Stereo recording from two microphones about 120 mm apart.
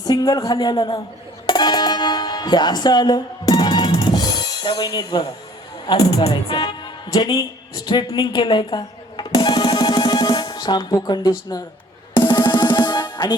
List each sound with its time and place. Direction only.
0.0 s speech: 30° left (ahead or behind)
1.5 s music: 40° left (ahead or behind)
5.9 s speech: 35° left (ahead or behind)
7.9 s music: 35° left (ahead or behind)